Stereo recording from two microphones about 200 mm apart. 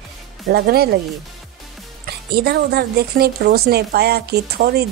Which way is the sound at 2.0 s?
50° right (ahead or behind).